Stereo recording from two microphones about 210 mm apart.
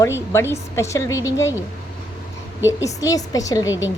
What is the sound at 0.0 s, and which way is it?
A woman's voice, 15° left (ahead or behind).